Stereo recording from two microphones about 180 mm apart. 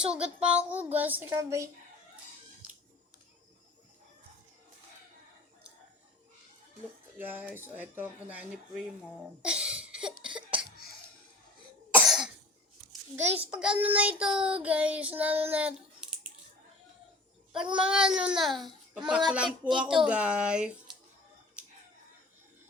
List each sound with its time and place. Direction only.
0.0 s a child's voice: 5° right (ahead or behind)
0.4 s child singing: 10° right (ahead or behind)
7.2 s child singing: 10° right (ahead or behind)
9.4 s a sound: 5° right (ahead or behind)
10.2 s cough: 30° right (ahead or behind)
11.9 s cough: 5° right (ahead or behind)
13.5 s child singing: 5° right (ahead or behind)
17.5 s a child's voice: 5° right (ahead or behind)